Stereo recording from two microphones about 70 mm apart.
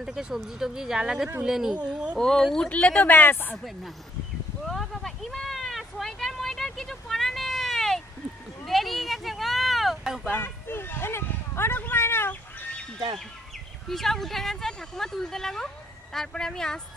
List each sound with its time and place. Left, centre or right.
0.0 s speech: centre
2.1 s speech: centre
2.6 s speech: centre
3.5 s speech: centre
4.6 s a sound: centre
10.3 s a sound: left
13.8 s speech: centre